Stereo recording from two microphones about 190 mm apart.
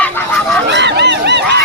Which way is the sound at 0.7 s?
65° right (ahead or behind).